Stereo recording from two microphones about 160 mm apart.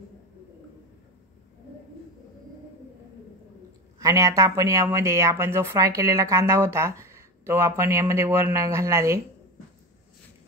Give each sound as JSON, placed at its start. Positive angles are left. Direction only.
{"t": 4.0, "sound": "speech", "side_deg": -20}